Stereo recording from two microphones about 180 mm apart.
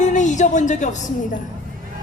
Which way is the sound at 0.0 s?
40° left (ahead or behind).